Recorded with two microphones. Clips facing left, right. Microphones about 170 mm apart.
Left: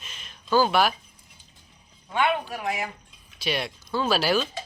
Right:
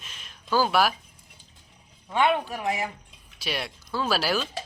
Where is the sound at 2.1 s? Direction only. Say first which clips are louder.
Right 1 dB; 25° right (ahead or behind).